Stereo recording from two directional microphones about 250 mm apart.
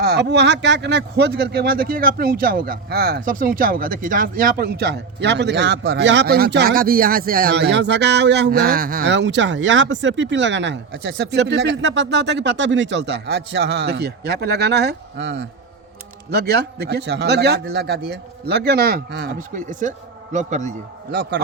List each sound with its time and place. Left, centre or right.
0.0 s a man's voice: right